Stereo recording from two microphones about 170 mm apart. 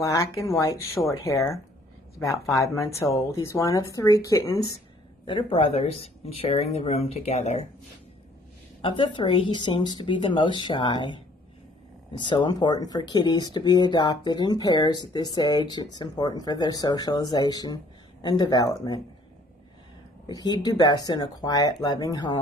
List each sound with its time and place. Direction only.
0.0 s speech: 20° left (ahead or behind)
5.2 s speech: 30° left (ahead or behind)
8.8 s speech: 30° left (ahead or behind)
12.2 s speech: 25° left (ahead or behind)
20.2 s speech: 25° left (ahead or behind)